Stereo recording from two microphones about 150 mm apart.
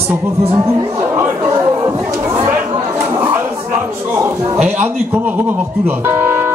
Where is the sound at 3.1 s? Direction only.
15° right (ahead or behind).